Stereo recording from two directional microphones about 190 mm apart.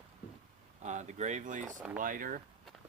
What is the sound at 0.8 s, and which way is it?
Speech, 40° right (ahead or behind).